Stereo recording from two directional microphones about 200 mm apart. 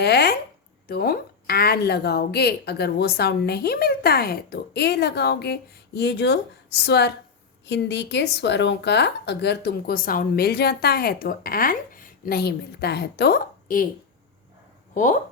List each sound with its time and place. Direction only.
0.0 s a woman's voice: 55° left (ahead or behind)
14.9 s speech: 40° left (ahead or behind)